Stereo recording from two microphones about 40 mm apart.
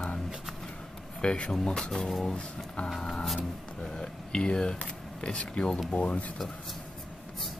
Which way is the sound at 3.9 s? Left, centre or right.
Left.